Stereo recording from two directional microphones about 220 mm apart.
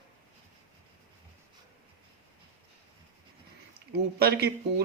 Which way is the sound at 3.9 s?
45° right (ahead or behind).